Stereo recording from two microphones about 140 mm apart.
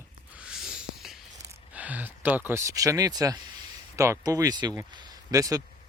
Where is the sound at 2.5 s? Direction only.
25° right (ahead or behind).